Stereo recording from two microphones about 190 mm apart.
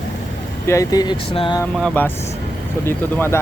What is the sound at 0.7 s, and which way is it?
Speech, 15° left (ahead or behind).